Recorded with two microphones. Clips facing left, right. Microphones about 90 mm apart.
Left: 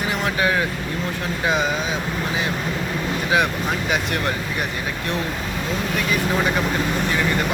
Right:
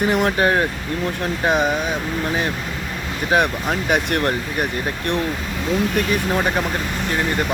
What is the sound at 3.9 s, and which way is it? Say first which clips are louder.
Speech: right 6 dB; 55° right (ahead or behind).